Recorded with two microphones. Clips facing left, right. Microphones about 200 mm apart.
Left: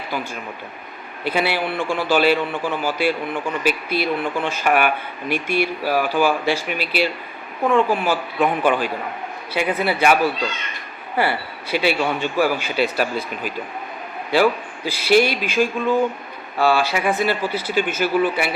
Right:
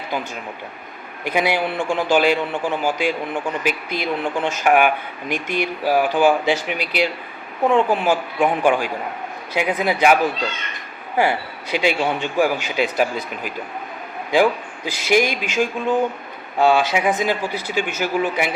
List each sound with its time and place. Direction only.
1.2 s a man's voice: 15° right (ahead or behind)